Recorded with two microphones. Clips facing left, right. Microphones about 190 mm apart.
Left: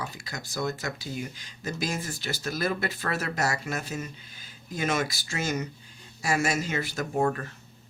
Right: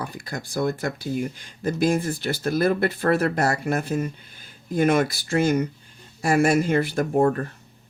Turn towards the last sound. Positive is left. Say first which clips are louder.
# right 6 dB
turn(degrees=-40)  # may be behind; listen again after turning